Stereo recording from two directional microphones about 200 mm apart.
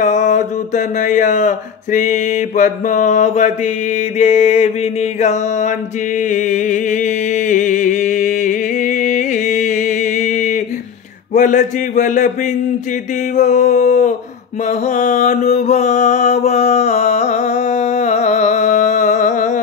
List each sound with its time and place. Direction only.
0.0 s mantra: 35° left (ahead or behind)
6.3 s music: 40° left (ahead or behind)
11.3 s mantra: 40° left (ahead or behind)
13.4 s mantra: 35° left (ahead or behind)